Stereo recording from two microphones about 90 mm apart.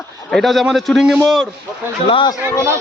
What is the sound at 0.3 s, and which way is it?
Speech, centre (ahead or behind).